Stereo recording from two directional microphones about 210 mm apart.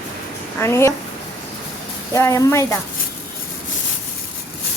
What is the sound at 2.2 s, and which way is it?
Speech, 15° left (ahead or behind).